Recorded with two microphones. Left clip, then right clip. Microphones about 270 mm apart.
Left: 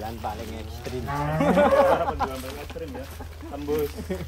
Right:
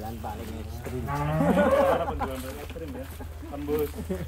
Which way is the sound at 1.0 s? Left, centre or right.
Left.